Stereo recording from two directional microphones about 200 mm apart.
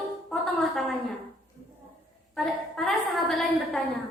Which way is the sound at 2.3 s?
Centre (ahead or behind).